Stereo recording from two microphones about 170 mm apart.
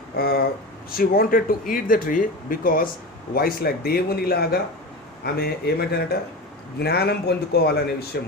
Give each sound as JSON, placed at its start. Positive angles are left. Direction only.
{"t": 0.2, "sound": "speech", "side_deg": 60}